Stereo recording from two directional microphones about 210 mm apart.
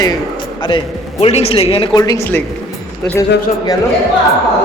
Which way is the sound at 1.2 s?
30° left (ahead or behind).